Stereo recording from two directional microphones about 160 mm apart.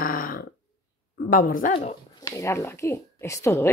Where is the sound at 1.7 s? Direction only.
40° left (ahead or behind).